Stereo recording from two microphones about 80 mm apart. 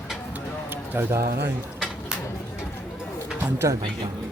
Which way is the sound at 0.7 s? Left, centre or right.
Right.